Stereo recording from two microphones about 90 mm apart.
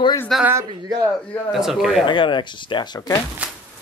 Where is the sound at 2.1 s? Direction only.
60° left (ahead or behind).